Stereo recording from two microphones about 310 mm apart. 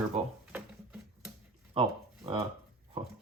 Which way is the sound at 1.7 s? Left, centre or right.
Centre.